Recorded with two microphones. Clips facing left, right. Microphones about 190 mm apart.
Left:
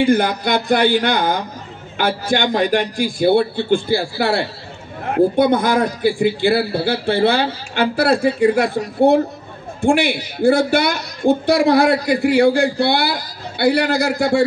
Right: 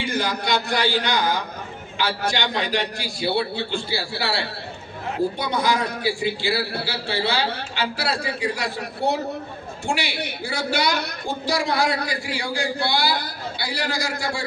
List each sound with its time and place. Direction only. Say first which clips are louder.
0.0 s a man's voice: left 10 dB; 55° left (ahead or behind)